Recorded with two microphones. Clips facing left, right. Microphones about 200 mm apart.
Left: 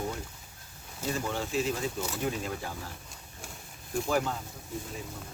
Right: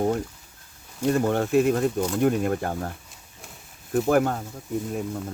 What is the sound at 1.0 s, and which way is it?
Speech, 55° right (ahead or behind).